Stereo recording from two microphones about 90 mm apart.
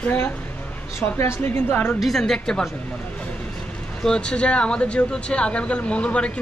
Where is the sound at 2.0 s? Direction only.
5° left (ahead or behind).